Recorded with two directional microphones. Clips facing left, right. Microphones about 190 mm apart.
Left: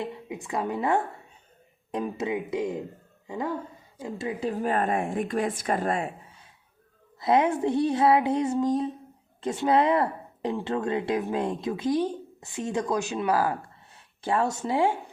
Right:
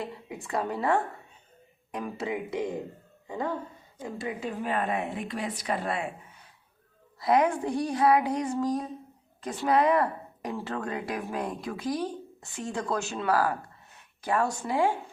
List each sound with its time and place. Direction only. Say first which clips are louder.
0.0 s speech: left 3 dB; 20° left (ahead or behind)
4.0 s a woman's voice: left 3 dB; 30° left (ahead or behind); by 6.1 s 45° left (ahead or behind)
7.2 s speech: left 2 dB; 25° left (ahead or behind)